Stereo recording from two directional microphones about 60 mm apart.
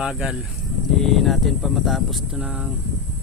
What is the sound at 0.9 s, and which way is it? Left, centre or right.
Speech, centre.